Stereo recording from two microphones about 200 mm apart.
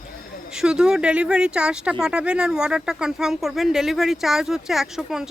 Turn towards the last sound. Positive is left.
turn(degrees=0)  # may be behind; listen again after turning